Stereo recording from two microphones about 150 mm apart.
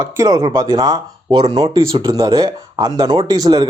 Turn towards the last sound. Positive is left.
turn(degrees=-25)  # may be behind; listen again after turning